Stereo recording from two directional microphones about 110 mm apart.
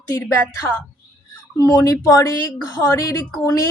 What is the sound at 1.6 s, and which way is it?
A woman's voice, 35° left (ahead or behind).